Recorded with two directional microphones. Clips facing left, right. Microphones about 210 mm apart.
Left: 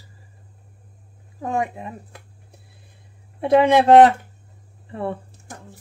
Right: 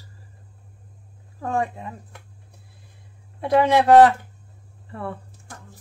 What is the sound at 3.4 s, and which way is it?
Speech, 20° left (ahead or behind).